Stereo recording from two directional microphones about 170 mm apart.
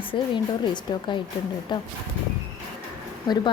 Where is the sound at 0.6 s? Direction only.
30° left (ahead or behind).